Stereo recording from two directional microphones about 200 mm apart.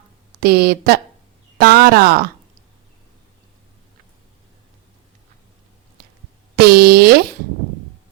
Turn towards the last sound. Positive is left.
turn(degrees=-50)  # may be behind; listen again after turning